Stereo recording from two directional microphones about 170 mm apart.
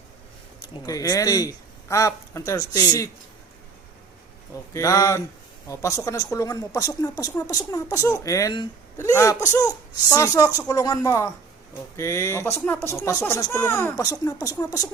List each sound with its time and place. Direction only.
0.9 s speech: 20° left (ahead or behind)
4.5 s speech: 20° left (ahead or behind)
10.7 s speech: 20° left (ahead or behind)